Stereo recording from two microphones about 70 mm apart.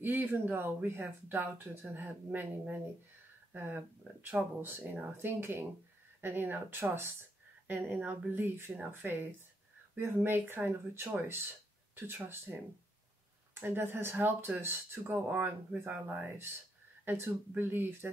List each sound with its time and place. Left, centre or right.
0.0 s speech: right
13.6 s speech: right